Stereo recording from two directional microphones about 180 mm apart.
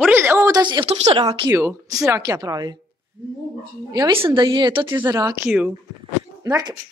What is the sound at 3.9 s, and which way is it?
A woman's voice, 25° right (ahead or behind).